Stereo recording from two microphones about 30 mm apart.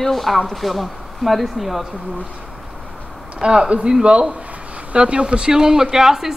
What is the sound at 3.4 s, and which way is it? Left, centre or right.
A woman's voice, right.